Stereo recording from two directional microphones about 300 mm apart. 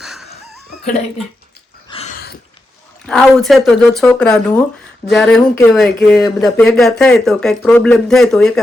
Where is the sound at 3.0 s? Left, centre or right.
Centre.